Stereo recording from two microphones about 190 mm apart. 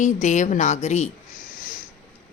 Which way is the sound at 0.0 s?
40° left (ahead or behind).